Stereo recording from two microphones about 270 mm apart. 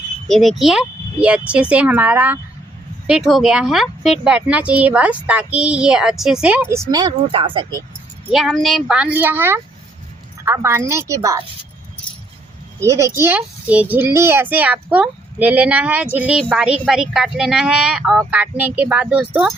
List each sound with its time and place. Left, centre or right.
0.3 s a woman's voice: centre
8.3 s a woman's voice: centre
12.8 s a child's voice: centre